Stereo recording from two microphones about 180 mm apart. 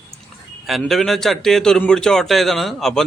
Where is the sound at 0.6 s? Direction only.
Centre (ahead or behind).